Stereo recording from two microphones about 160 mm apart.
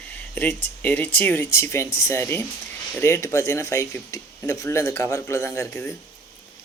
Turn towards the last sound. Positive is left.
turn(degrees=15)  # may be behind; listen again after turning